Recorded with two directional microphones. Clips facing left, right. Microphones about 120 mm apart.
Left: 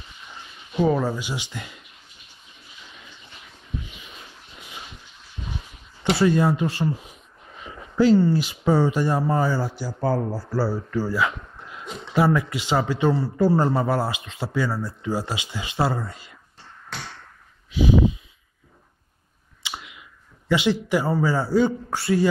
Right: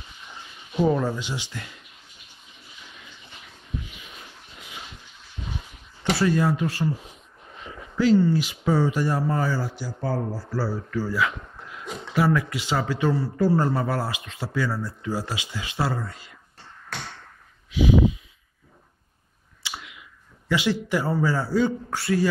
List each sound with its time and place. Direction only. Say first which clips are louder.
0.7 s speech: left 1 dB; centre (ahead or behind)
6.1 s speech: left 3 dB; 25° left (ahead or behind)
8.0 s speech: left 2 dB; 30° left (ahead or behind)
9.8 s speech: left 4 dB; 40° left (ahead or behind); by 16.2 s 20° left (ahead or behind)
17.6 s a sound: even; 30° left (ahead or behind)
20.4 s speech: left 3 dB; 20° left (ahead or behind)